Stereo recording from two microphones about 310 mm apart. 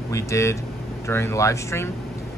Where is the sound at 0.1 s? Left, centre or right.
Centre.